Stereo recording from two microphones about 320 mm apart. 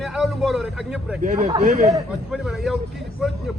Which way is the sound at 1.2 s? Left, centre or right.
Right.